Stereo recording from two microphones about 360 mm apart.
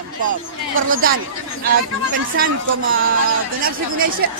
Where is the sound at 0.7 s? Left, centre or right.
Right.